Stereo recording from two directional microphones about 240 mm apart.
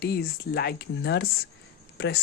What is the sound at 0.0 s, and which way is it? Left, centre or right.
Speech, left.